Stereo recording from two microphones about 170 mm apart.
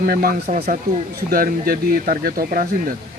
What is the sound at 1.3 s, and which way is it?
Speech, 60° right (ahead or behind).